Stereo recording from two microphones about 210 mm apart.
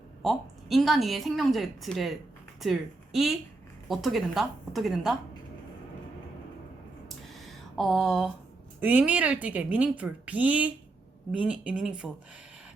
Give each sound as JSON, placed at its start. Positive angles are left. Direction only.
{"t": 0.2, "sound": "a woman's voice", "side_deg": 0}
{"t": 7.3, "sound": "a sound", "side_deg": 0}
{"t": 8.8, "sound": "a woman's voice", "side_deg": -10}